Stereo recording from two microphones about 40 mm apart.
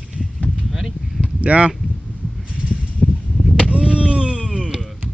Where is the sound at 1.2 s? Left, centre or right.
Right.